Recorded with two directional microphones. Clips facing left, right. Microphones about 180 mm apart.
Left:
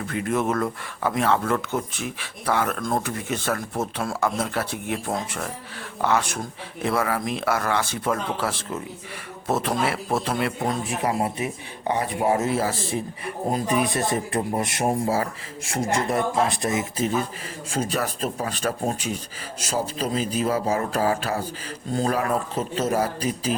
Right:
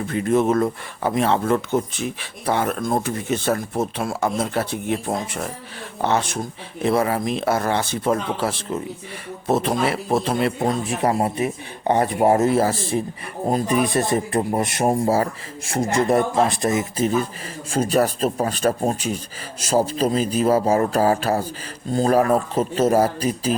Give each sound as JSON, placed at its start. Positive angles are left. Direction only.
{"t": 0.1, "sound": "speech", "side_deg": -30}
{"t": 11.0, "sound": "speech", "side_deg": -40}